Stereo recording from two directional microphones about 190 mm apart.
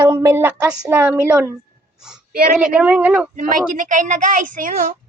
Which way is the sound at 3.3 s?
45° right (ahead or behind).